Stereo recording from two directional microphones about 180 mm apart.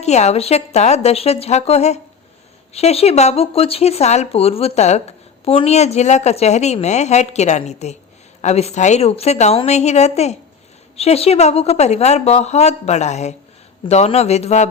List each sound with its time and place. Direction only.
0.0 s a woman's voice: 40° left (ahead or behind)